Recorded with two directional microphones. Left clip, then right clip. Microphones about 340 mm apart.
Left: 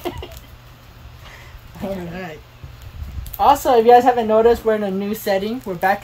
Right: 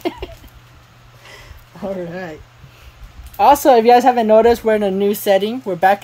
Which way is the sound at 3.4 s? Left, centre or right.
Right.